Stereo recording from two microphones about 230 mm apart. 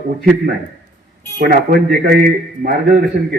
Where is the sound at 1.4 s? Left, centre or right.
Right.